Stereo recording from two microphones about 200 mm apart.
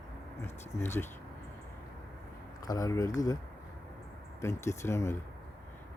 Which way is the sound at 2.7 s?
15° left (ahead or behind).